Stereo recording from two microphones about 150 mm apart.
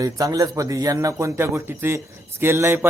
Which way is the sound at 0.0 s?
25° right (ahead or behind).